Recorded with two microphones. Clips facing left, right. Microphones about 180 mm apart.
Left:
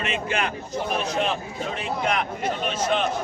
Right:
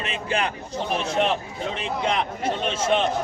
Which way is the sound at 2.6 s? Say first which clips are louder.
Right 2 dB; 25° right (ahead or behind).